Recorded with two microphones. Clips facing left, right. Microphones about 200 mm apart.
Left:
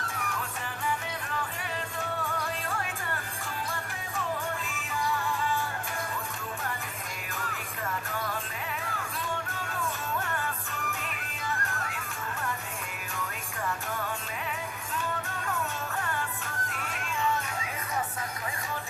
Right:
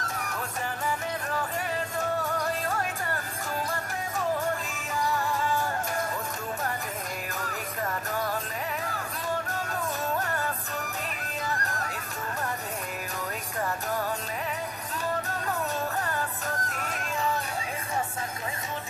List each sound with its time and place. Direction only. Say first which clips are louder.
0.2 s music: left 1 dB; 40° right (ahead or behind)
2.0 s music: right 5 dB; 40° right (ahead or behind)
4.9 s music: right 3 dB; 40° right (ahead or behind)
7.3 s music: right 2 dB; 40° right (ahead or behind)
16.6 s music: right 3 dB; 40° right (ahead or behind)